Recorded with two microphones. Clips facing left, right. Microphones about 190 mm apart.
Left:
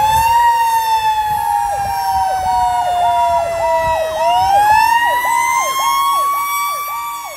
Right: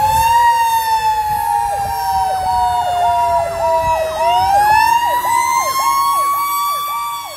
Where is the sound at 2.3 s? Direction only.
5° left (ahead or behind).